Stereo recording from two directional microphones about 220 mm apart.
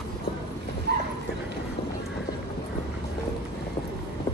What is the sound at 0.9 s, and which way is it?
Bow-wow, 45° right (ahead or behind).